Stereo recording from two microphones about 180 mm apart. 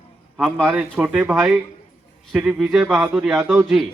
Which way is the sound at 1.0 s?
10° right (ahead or behind).